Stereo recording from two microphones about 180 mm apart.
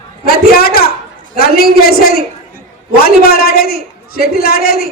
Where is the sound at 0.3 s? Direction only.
55° left (ahead or behind).